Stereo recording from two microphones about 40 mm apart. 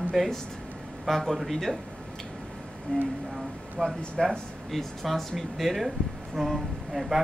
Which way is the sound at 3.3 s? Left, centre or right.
Centre.